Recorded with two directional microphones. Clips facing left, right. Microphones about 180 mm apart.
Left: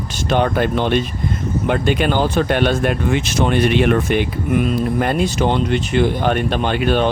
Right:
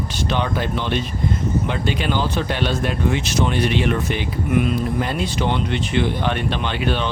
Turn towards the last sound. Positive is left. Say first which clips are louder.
# left 6 dB
turn(degrees=50)  # may be behind; listen again after turning